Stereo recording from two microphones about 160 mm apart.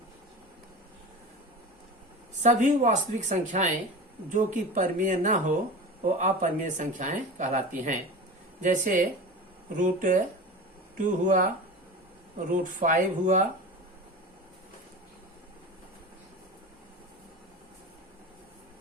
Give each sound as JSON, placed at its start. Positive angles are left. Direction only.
{"t": 2.4, "sound": "speech", "side_deg": -50}
{"t": 12.5, "sound": "speech", "side_deg": -55}